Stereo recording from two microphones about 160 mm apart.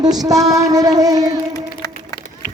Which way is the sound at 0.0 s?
25° right (ahead or behind).